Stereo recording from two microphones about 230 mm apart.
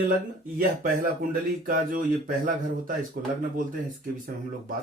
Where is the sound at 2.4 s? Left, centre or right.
Right.